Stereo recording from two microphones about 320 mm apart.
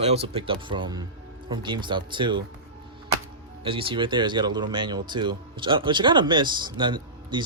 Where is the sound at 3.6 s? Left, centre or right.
Centre.